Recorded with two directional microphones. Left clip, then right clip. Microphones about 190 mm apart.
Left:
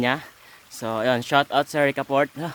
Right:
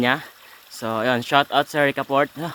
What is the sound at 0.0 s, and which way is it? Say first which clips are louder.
Speech: right 3 dB; 10° left (ahead or behind).